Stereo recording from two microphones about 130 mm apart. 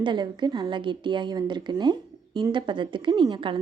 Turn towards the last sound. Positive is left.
turn(degrees=-40)  # may be behind; listen again after turning